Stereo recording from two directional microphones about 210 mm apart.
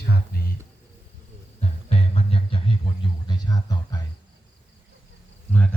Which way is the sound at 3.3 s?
20° left (ahead or behind).